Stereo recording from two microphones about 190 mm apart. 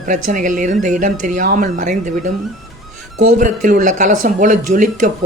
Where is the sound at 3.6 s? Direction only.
40° right (ahead or behind).